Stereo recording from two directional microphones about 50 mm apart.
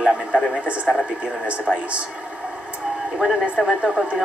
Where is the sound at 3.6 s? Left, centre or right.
Centre.